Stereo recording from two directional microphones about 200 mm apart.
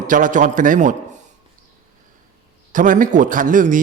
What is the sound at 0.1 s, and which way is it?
Speech, 40° right (ahead or behind).